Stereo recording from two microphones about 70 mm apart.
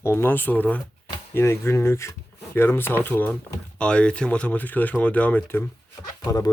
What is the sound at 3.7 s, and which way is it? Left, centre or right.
Speech, centre.